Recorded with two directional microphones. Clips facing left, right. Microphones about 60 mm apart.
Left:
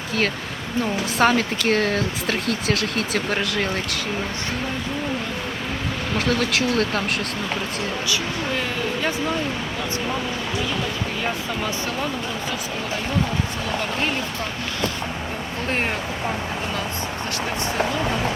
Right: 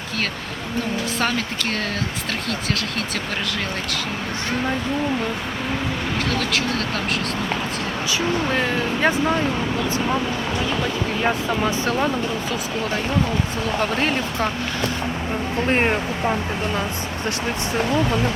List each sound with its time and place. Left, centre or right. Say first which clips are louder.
1.2 s speech: left 6 dB; left
15.7 s speech: right 5 dB; right